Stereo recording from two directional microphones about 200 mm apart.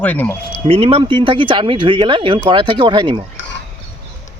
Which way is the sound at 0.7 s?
30° right (ahead or behind).